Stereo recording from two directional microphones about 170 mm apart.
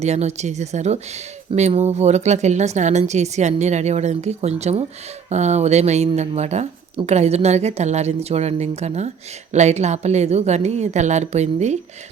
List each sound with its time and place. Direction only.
0.0 s speech: 40° right (ahead or behind)